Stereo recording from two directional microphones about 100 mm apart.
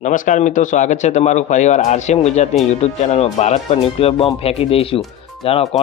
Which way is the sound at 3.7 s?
75° left (ahead or behind).